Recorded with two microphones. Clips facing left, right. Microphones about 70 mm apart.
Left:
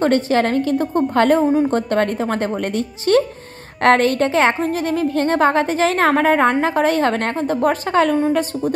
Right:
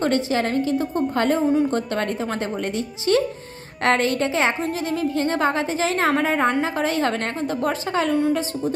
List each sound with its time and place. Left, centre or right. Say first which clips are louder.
0.0 s a woman's voice: left 5 dB; left